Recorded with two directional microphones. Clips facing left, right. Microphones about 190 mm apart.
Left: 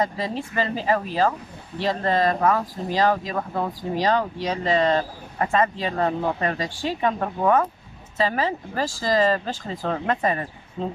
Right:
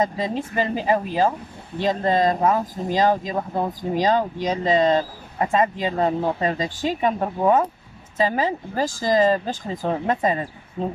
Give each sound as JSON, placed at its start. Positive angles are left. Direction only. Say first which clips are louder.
{"t": 0.0, "sound": "speech", "louder": "right 2 dB", "side_deg": -20}